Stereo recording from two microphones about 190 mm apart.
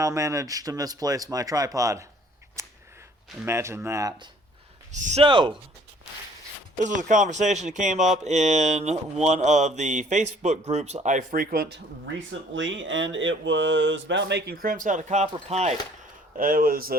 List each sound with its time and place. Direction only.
0.0 s speech: 15° right (ahead or behind)
2.6 s a sound: 15° right (ahead or behind)
3.4 s speech: 15° right (ahead or behind)
4.9 s speech: 40° right (ahead or behind)
5.2 s speech: 25° right (ahead or behind)
6.7 s speech: 40° right (ahead or behind)
12.3 s speech: 80° right; by 15.7 s 35° right (ahead or behind)
16.4 s speech: 50° right (ahead or behind)